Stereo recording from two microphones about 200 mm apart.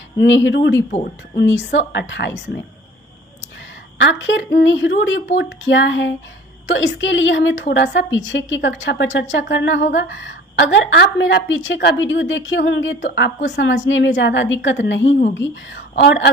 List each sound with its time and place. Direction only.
0.2 s a woman's voice: 70° left (ahead or behind)
4.0 s a woman's voice: 65° left (ahead or behind)
13.1 s a woman's voice: 60° left (ahead or behind)